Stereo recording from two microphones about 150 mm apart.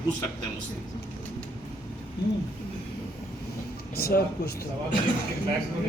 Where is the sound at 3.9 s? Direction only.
90° left.